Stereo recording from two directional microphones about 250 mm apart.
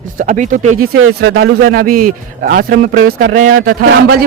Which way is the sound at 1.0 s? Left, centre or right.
Right.